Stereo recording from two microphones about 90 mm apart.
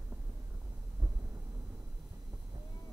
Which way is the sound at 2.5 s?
50° right (ahead or behind).